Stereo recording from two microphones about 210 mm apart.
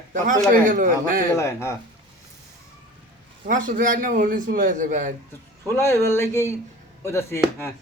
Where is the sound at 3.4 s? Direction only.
40° right (ahead or behind).